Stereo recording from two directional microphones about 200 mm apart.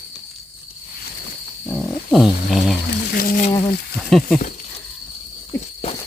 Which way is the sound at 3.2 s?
45° left (ahead or behind).